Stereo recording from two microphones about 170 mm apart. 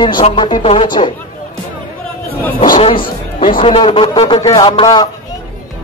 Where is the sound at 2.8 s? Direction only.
35° left (ahead or behind).